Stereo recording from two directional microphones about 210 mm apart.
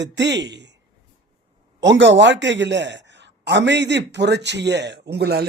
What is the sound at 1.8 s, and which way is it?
A man's voice, 60° right (ahead or behind).